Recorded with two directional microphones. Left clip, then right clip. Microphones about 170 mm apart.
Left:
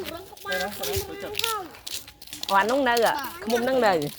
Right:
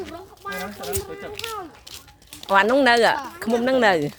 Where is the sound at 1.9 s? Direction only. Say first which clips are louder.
Left 5 dB; 25° left (ahead or behind).